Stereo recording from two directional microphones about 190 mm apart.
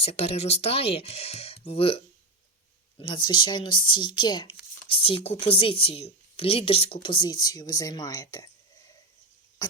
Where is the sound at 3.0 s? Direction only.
25° left (ahead or behind).